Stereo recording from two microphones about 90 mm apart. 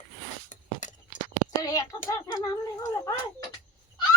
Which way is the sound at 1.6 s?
40° left (ahead or behind).